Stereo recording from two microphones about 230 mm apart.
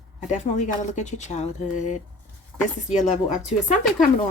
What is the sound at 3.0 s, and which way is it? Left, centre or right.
Speech, left.